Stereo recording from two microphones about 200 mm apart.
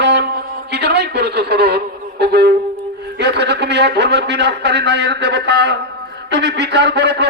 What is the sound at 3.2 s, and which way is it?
Speech, 60° right (ahead or behind).